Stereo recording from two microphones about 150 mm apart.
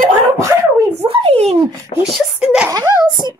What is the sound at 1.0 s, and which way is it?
Speech, 45° right (ahead or behind).